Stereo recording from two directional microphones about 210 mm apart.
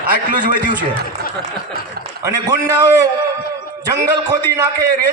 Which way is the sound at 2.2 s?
15° right (ahead or behind).